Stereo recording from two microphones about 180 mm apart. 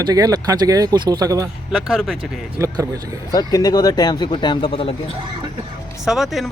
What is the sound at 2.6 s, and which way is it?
Speech, 15° right (ahead or behind).